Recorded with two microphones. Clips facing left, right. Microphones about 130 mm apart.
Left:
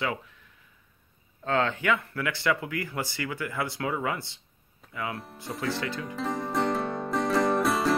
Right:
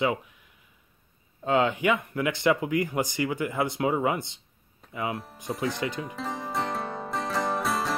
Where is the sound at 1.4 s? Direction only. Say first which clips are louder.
Right 3 dB; 15° right (ahead or behind).